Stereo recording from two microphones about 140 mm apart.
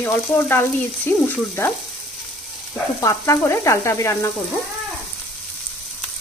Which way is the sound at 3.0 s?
20° left (ahead or behind).